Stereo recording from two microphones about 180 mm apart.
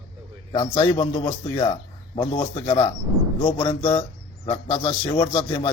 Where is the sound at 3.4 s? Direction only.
25° left (ahead or behind).